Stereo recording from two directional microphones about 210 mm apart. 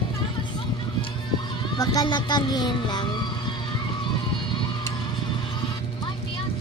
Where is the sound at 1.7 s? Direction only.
20° left (ahead or behind).